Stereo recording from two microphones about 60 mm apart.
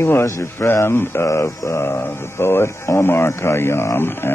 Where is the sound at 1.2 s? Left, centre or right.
Left.